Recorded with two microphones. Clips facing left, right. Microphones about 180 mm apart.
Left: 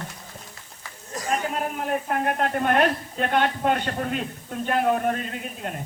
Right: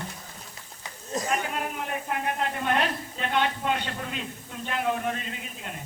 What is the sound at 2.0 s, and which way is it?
A man's voice, 50° left (ahead or behind).